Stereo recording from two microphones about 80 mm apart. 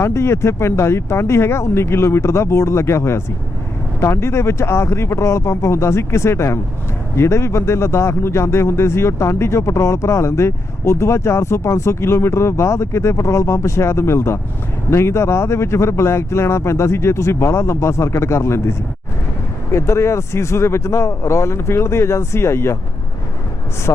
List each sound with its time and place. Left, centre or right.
0.0 s speech: left